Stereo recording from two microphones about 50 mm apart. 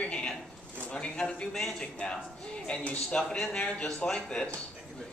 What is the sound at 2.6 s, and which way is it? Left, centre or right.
A man's voice, left.